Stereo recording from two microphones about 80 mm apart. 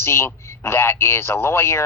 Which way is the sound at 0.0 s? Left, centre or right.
Left.